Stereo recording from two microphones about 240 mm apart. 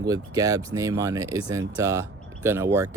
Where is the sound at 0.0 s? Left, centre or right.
Centre.